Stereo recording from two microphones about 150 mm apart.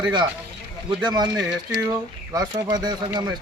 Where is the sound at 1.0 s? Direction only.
30° right (ahead or behind).